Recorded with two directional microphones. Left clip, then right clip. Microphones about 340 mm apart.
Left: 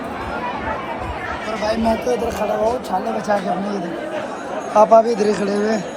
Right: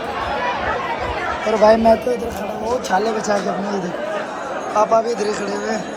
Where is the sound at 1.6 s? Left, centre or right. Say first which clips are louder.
Right 10 dB; right.